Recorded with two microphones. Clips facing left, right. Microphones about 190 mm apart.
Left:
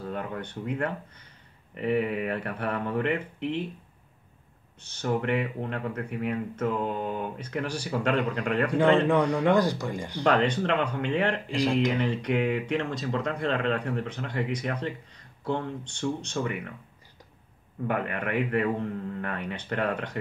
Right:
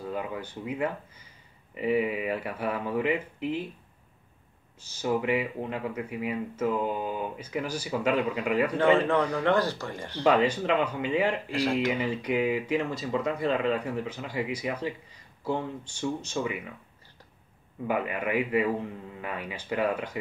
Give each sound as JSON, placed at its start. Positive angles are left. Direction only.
{"t": 0.0, "sound": "speech", "side_deg": -5}
{"t": 4.8, "sound": "speech", "side_deg": -5}
{"t": 9.4, "sound": "speech", "side_deg": 15}
{"t": 10.2, "sound": "speech", "side_deg": -5}
{"t": 17.8, "sound": "speech", "side_deg": -5}